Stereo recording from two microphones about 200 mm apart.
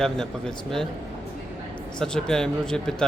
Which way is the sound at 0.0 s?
Centre (ahead or behind).